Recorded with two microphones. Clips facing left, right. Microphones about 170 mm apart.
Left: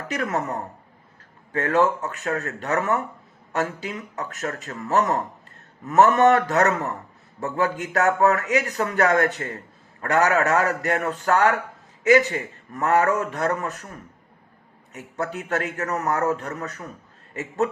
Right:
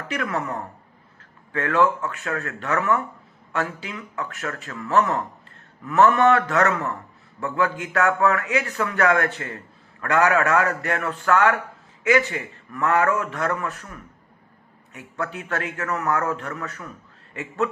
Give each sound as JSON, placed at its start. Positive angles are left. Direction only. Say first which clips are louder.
{"t": 0.1, "sound": "a man's voice", "louder": "left 1 dB", "side_deg": 40}